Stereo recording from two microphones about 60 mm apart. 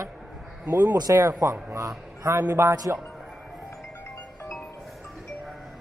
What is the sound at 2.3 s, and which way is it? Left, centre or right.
Speech, right.